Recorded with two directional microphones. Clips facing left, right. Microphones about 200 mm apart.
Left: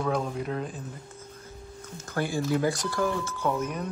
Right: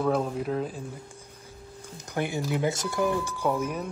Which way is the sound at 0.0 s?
5° right (ahead or behind).